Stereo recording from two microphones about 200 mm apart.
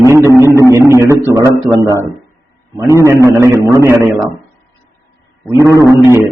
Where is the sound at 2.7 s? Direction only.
15° right (ahead or behind).